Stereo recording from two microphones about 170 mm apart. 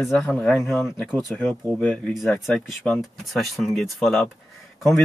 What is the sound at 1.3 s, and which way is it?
Speech, 10° left (ahead or behind).